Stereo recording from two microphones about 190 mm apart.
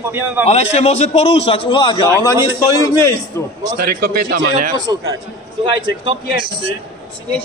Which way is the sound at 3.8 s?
50° right (ahead or behind).